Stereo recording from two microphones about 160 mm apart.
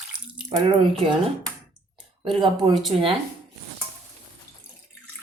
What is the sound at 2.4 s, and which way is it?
Speech, 30° right (ahead or behind).